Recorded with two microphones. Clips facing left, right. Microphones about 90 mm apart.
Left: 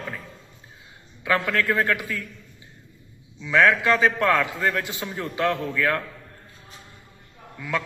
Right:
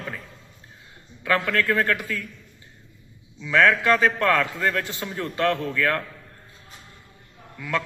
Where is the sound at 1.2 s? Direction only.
15° left (ahead or behind).